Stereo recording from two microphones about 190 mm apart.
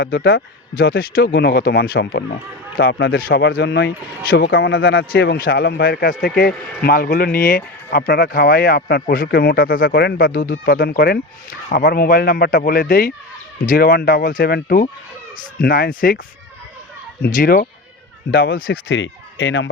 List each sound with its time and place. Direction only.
0.0 s speech: 60° left (ahead or behind)
0.8 s speech: 50° left (ahead or behind); by 5.4 s 80° left
5.5 s a man's voice: 55° left (ahead or behind)
17.2 s a man's voice: 50° left (ahead or behind)
18.9 s speech: 75° left (ahead or behind)